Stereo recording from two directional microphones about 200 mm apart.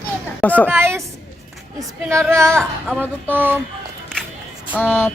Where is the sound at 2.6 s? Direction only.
Centre (ahead or behind).